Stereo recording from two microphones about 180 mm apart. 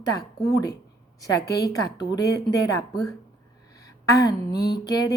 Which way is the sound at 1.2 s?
20° left (ahead or behind).